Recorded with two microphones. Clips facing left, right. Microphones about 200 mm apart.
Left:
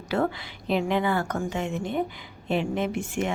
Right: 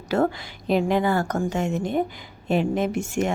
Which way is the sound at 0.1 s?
45° right (ahead or behind).